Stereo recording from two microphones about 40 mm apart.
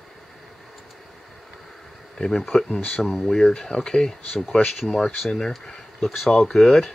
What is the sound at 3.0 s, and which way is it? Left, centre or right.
Speech, centre.